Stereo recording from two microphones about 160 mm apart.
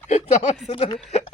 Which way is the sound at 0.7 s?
35° left (ahead or behind).